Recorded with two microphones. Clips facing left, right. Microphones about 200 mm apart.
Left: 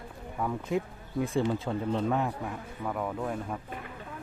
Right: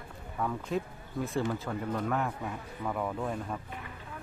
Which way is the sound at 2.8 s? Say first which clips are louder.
Left 1 dB; centre (ahead or behind).